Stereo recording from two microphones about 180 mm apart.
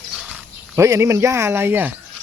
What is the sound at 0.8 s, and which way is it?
Speech, 15° right (ahead or behind).